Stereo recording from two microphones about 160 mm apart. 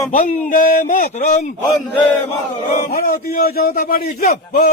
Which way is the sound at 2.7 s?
55° left (ahead or behind).